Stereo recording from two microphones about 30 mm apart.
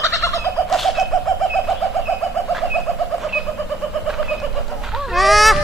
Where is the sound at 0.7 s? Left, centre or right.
Centre.